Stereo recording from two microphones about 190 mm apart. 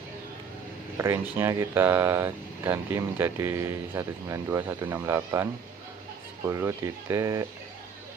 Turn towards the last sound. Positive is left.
turn(degrees=-15)  # may be behind; listen again after turning